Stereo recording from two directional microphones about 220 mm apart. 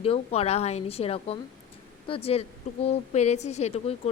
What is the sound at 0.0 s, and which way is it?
Speech, 25° left (ahead or behind).